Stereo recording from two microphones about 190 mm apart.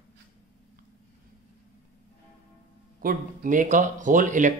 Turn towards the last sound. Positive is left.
turn(degrees=-40)  # may be behind; listen again after turning